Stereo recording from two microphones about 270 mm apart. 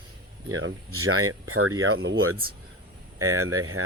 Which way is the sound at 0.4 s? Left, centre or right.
Right.